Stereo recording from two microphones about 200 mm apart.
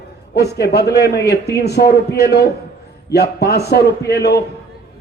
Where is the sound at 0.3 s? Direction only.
55° left (ahead or behind).